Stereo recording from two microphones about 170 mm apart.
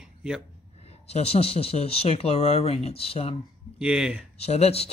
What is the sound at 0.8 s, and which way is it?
Speech, 35° left (ahead or behind).